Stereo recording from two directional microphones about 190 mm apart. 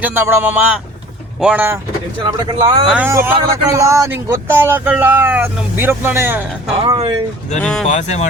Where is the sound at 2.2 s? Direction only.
25° right (ahead or behind).